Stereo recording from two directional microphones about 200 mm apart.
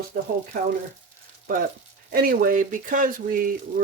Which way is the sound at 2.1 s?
45° right (ahead or behind).